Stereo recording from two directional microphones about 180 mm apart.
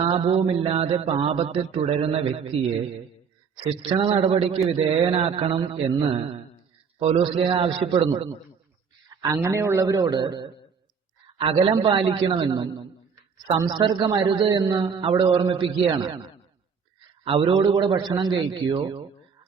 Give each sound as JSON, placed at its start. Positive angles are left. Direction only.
{"t": 0.0, "sound": "a man's voice", "side_deg": -30}
{"t": 3.8, "sound": "a man's voice", "side_deg": -30}
{"t": 9.0, "sound": "a man's voice", "side_deg": -20}
{"t": 17.2, "sound": "a man's voice", "side_deg": -30}